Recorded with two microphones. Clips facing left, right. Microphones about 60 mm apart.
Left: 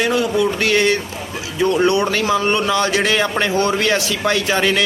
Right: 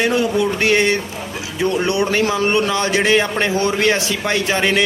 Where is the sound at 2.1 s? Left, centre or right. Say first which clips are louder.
Even; right.